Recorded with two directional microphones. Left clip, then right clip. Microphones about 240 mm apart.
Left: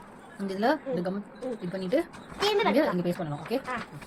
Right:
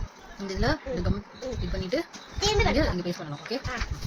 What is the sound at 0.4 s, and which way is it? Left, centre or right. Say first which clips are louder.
Speech: left 2 dB; centre.